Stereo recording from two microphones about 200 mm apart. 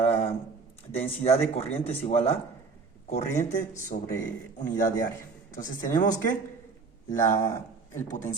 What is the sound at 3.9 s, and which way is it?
Speech, 45° left (ahead or behind).